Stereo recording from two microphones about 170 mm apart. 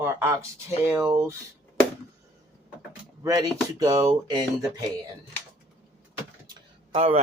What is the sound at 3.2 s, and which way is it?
Speech, 20° right (ahead or behind).